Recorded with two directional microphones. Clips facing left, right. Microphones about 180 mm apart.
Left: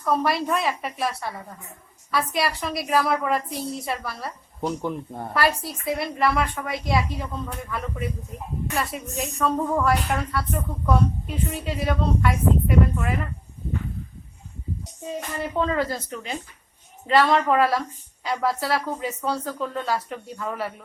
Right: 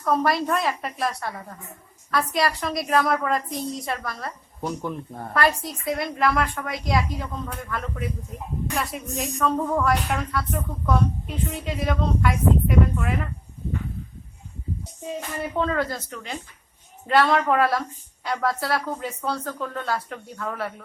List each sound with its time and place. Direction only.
0.0 s speech: centre (ahead or behind)
4.6 s speech: 20° left (ahead or behind)
5.3 s speech: 5° left (ahead or behind)
15.5 s speech: 5° left (ahead or behind)